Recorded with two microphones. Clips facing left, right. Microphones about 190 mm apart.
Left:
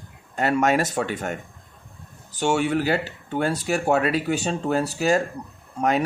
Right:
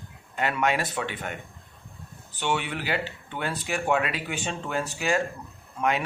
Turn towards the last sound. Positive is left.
turn(degrees=40)  # may be behind; listen again after turning